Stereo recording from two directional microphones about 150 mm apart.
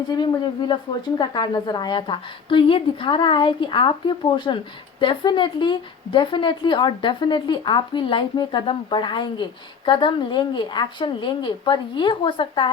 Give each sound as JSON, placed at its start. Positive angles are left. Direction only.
{"t": 0.7, "sound": "a woman's voice", "side_deg": 30}